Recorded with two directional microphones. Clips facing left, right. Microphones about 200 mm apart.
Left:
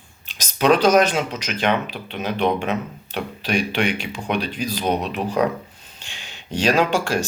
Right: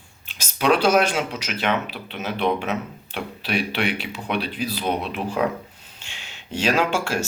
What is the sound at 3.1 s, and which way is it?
Speech, 40° left (ahead or behind).